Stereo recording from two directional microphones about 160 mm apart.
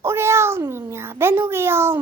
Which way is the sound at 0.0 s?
15° right (ahead or behind).